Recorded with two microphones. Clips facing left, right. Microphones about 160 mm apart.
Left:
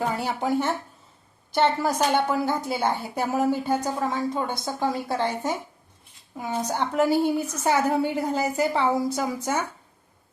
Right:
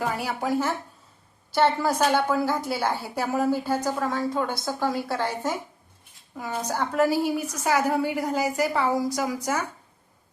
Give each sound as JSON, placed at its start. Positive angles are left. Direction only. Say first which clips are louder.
{"t": 0.2, "sound": "a woman's voice", "louder": "left 1 dB", "side_deg": 25}